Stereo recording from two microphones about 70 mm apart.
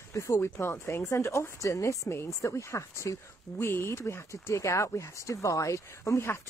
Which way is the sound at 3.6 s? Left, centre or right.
Left.